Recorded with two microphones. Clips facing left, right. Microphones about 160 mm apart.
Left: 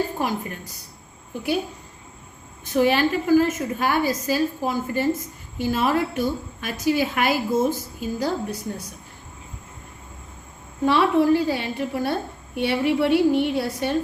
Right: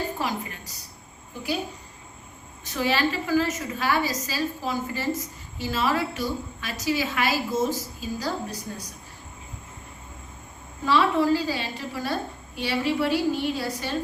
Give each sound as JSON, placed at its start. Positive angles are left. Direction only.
{"t": 0.2, "sound": "a woman's voice", "side_deg": 50}
{"t": 2.6, "sound": "a woman's voice", "side_deg": 55}
{"t": 10.8, "sound": "a woman's voice", "side_deg": 60}